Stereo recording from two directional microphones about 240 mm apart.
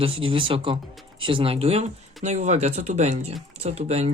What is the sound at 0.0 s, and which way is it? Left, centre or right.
Speech, right.